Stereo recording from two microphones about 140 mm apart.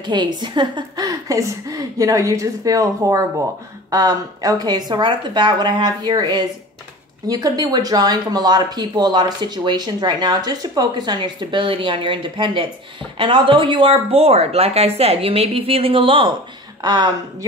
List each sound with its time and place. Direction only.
0.0 s speech: 30° right (ahead or behind)